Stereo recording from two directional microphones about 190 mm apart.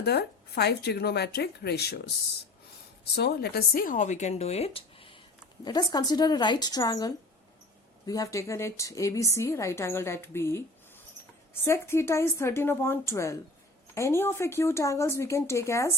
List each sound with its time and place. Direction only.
0.0 s speech: 60° left (ahead or behind)
3.2 s a woman's voice: 55° left (ahead or behind); by 16.0 s 15° left (ahead or behind)